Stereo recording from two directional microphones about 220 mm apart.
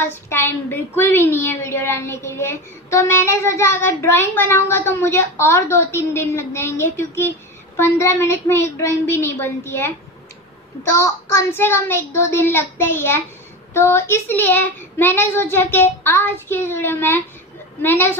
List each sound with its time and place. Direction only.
0.1 s a woman's voice: 10° left (ahead or behind)
11.3 s a woman's voice: 10° left (ahead or behind)